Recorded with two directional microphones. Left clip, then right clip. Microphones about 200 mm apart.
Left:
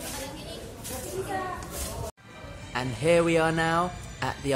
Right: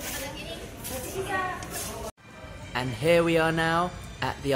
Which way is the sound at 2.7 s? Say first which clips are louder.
Even; 5° left (ahead or behind).